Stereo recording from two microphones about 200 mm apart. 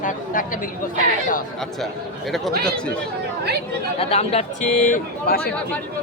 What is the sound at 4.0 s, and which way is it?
Speech, 30° left (ahead or behind).